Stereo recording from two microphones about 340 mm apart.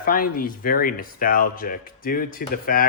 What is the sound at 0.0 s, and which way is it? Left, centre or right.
Speech, left.